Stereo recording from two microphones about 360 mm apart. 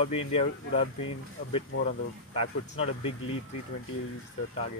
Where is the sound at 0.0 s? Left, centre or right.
Centre.